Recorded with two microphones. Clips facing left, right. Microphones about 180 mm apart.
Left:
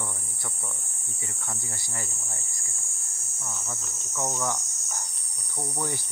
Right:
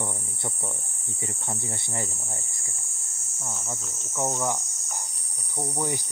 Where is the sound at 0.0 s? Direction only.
25° right (ahead or behind).